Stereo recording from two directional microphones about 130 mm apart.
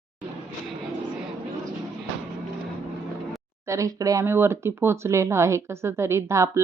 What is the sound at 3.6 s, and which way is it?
Speech, 25° right (ahead or behind).